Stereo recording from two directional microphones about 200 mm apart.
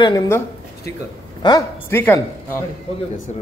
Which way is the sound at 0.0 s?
20° left (ahead or behind).